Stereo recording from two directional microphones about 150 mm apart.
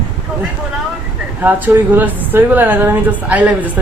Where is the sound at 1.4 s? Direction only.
10° right (ahead or behind).